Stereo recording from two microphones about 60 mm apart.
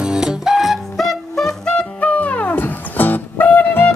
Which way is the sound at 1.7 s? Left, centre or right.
Left.